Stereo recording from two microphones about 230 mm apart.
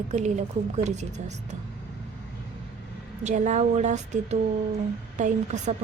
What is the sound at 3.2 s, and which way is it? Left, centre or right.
A woman's voice, right.